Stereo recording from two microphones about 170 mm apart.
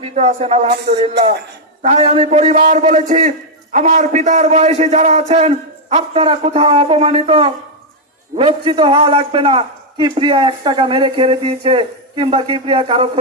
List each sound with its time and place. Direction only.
0.0 s a man's voice: 40° right (ahead or behind)
1.9 s a man's voice: 40° right (ahead or behind)
8.6 s a man's voice: 30° right (ahead or behind)